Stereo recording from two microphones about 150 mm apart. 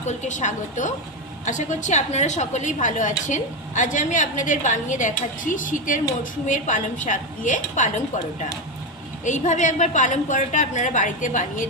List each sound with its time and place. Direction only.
0.0 s a woman's voice: 50° left (ahead or behind)
9.2 s a woman's voice: 55° left (ahead or behind)